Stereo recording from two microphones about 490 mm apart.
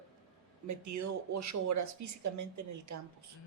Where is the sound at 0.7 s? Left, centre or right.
Right.